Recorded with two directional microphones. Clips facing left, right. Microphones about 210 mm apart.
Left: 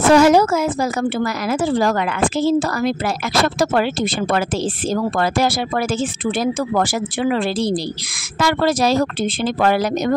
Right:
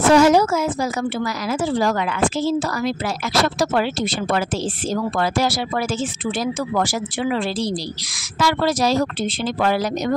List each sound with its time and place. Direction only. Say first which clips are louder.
0.1 s a woman's voice: left 2 dB; 60° left (ahead or behind)